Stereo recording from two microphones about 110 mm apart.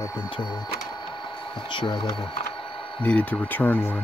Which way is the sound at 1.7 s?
45° left (ahead or behind).